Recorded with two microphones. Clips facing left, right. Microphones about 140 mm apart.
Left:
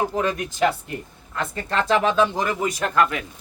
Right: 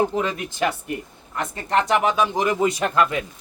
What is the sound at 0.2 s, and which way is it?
Speech, 20° right (ahead or behind).